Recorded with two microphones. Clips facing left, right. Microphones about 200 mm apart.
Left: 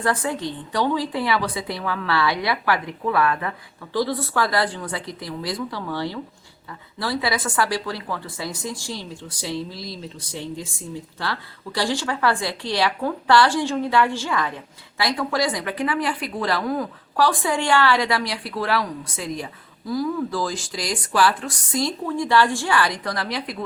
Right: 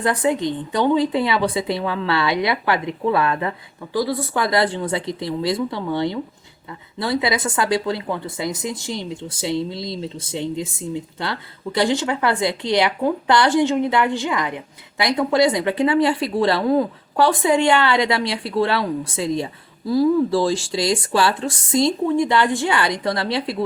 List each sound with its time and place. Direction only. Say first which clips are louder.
0.0 s speech: right 5 dB; 20° right (ahead or behind)
3.9 s speech: right 1 dB; 10° right (ahead or behind); by 23.6 s 25° right (ahead or behind)